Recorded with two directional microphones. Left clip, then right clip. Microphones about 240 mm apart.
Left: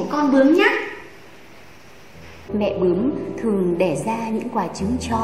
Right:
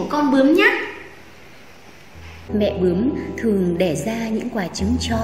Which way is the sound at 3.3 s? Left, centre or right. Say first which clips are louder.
Even; right.